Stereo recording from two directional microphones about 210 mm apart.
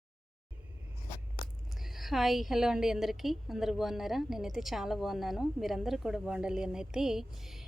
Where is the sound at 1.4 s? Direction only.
45° left (ahead or behind).